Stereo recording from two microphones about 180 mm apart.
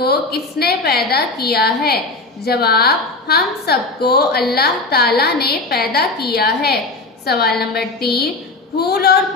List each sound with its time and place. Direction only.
0.0 s a woman's voice: 60° left (ahead or behind)